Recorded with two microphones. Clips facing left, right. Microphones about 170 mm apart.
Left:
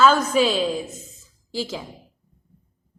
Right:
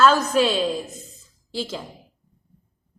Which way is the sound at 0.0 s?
5° left (ahead or behind).